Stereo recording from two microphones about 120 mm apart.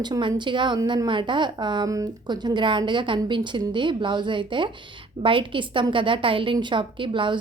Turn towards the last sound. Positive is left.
turn(degrees=-45)  # may be behind; listen again after turning